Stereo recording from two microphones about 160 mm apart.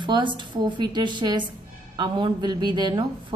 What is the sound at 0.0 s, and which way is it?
A woman's voice, 30° right (ahead or behind).